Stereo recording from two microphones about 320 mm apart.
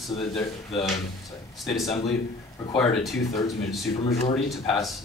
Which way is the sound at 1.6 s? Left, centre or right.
Centre.